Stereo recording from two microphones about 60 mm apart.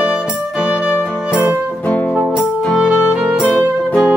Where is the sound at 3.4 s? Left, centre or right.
Left.